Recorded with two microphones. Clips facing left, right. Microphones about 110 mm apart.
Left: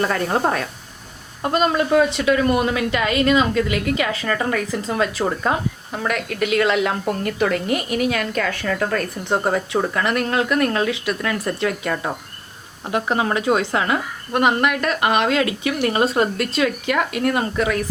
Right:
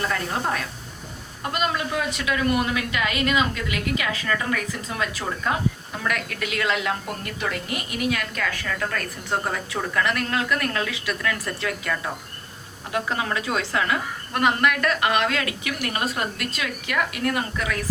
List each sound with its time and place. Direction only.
0.0 s a woman's voice: 40° left (ahead or behind)
6.7 s a woman's voice: 55° left (ahead or behind)
8.4 s a woman's voice: 35° left (ahead or behind)